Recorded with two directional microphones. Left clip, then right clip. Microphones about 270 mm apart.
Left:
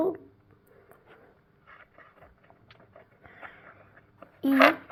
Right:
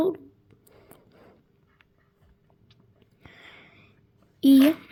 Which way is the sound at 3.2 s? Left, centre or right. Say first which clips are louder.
Left 1 dB; right.